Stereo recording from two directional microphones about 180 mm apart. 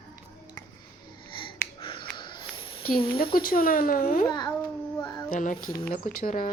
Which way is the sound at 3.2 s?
55° left (ahead or behind).